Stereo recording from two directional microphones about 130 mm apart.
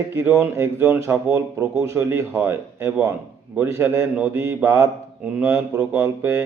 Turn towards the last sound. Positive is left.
turn(degrees=-15)  # may be behind; listen again after turning